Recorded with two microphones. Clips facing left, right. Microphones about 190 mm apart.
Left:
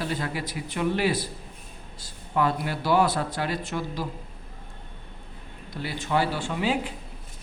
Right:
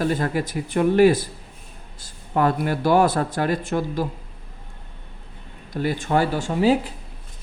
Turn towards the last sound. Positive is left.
turn(degrees=-40)  # may be behind; listen again after turning